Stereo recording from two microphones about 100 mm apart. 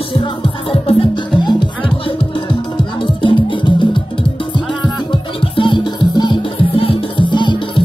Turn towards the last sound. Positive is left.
turn(degrees=55)  # may be behind; listen again after turning